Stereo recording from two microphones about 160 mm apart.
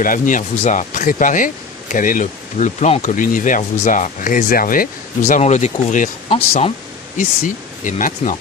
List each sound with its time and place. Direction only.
0.0 s speech: 55° left (ahead or behind); by 6.7 s 40° left (ahead or behind)
7.2 s speech: 55° left (ahead or behind)